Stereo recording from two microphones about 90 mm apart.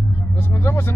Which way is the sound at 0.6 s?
25° left (ahead or behind).